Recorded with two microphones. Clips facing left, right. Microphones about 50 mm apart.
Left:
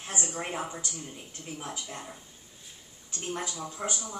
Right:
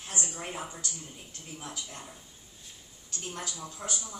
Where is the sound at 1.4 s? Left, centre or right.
Left.